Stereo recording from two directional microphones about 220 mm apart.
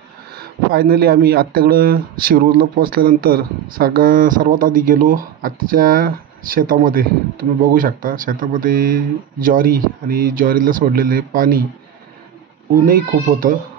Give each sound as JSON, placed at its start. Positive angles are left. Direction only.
{"t": 0.4, "sound": "speech", "side_deg": -45}
{"t": 12.8, "sound": "speech", "side_deg": -40}